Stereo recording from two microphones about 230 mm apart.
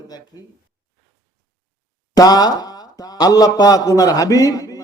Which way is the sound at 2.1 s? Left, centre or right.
Centre.